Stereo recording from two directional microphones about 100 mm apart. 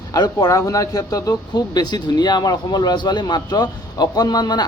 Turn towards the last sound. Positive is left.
turn(degrees=45)  # may be behind; listen again after turning